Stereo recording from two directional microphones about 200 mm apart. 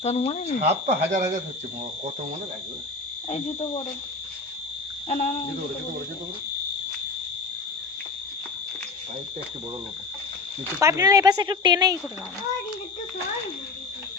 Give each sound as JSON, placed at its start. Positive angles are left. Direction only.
{"t": 0.0, "sound": "speech", "side_deg": 35}
{"t": 0.6, "sound": "speech", "side_deg": -35}
{"t": 3.2, "sound": "speech", "side_deg": 25}
{"t": 5.0, "sound": "speech", "side_deg": 40}
{"t": 10.8, "sound": "speech", "side_deg": -15}